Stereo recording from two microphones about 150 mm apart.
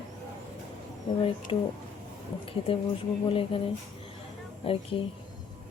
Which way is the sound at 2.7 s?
35° left (ahead or behind).